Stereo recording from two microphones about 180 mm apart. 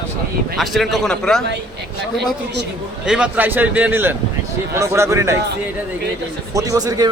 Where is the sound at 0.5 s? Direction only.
Centre (ahead or behind).